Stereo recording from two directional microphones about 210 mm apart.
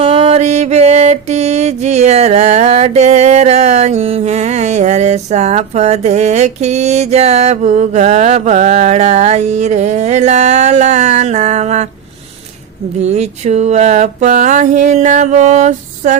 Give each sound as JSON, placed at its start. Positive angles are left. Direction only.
{"t": 0.0, "sound": "music", "side_deg": -25}
{"t": 13.0, "sound": "music", "side_deg": -30}